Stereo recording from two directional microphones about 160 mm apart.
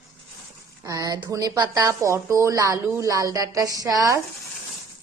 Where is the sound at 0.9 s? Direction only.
25° right (ahead or behind).